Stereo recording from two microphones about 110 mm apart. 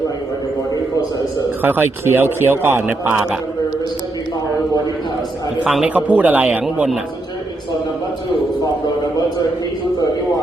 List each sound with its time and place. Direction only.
1.6 s a man's voice: 20° right (ahead or behind)
5.6 s a man's voice: 10° right (ahead or behind)